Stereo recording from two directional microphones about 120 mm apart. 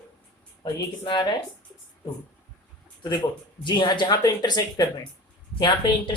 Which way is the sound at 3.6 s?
40° left (ahead or behind).